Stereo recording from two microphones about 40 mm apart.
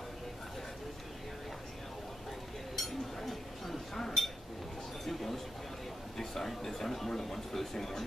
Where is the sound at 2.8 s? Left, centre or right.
Centre.